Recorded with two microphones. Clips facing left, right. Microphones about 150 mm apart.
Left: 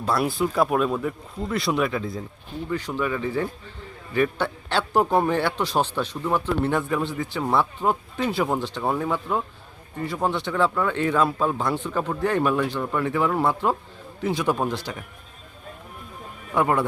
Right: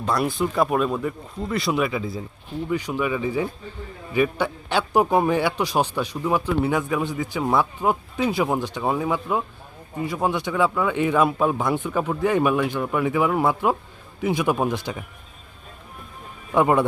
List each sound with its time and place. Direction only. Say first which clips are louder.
0.0 s speech: even; centre (ahead or behind)
2.6 s speech: right 2 dB; 15° right (ahead or behind)
16.6 s a man's voice: right 3 dB; 20° right (ahead or behind)